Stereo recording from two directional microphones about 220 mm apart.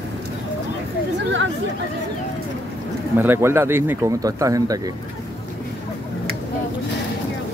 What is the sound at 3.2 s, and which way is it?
Speech, 10° right (ahead or behind).